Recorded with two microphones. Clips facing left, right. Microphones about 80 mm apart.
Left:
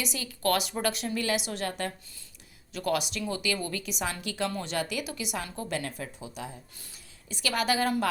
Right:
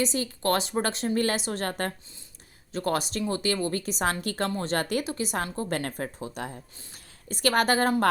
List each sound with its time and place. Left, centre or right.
0.0 s a woman's voice: right